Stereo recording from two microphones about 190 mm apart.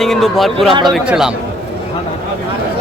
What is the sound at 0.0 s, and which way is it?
Speech, centre (ahead or behind).